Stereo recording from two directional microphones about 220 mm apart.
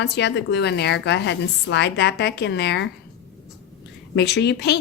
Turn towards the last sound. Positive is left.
turn(degrees=50)  # may be behind; listen again after turning